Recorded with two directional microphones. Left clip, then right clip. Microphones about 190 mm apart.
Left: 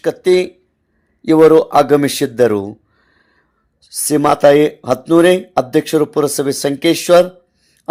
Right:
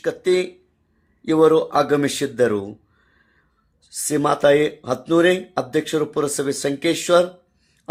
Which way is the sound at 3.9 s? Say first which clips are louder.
Left 7 dB; 30° left (ahead or behind).